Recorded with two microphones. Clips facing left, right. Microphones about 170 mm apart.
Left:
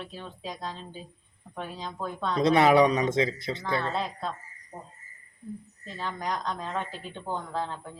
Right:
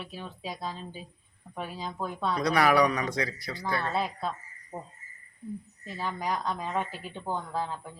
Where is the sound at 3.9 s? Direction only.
5° right (ahead or behind).